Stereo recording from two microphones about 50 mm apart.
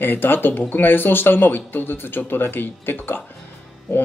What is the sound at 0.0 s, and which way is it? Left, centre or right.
Speech, left.